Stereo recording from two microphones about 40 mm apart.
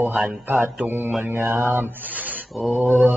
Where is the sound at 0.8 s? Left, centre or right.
Right.